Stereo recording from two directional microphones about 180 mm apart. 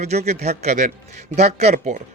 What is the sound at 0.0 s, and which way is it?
A man's voice, 35° right (ahead or behind).